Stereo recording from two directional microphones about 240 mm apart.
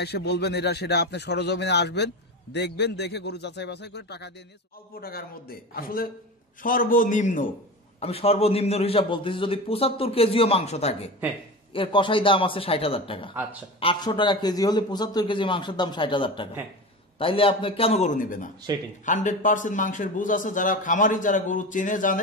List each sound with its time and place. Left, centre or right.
0.0 s a man's voice: left